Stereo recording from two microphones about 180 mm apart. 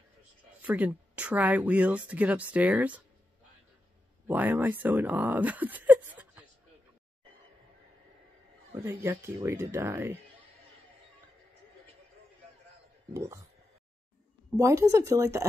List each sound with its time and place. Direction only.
0.6 s speech: 10° right (ahead or behind)
4.3 s speech: 10° right (ahead or behind)
8.7 s speech: 15° right (ahead or behind)
13.1 s speech: 15° right (ahead or behind)
14.6 s speech: 15° right (ahead or behind)